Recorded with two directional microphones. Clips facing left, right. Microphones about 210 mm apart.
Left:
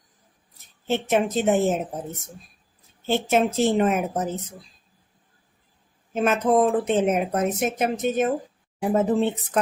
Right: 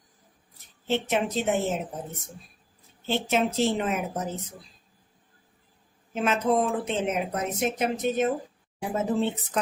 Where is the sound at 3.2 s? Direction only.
50° left (ahead or behind).